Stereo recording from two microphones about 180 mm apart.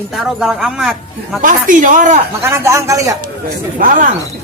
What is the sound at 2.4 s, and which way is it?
Speech, 15° right (ahead or behind).